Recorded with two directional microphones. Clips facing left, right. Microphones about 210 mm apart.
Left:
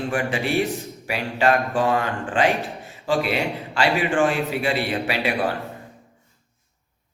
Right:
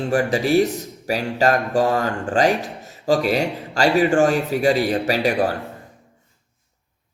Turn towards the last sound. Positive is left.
turn(degrees=-40)  # may be behind; listen again after turning